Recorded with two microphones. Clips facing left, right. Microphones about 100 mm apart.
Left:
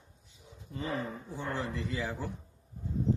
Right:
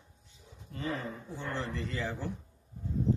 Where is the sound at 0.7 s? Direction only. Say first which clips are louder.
Left 1 dB; 15° left (ahead or behind).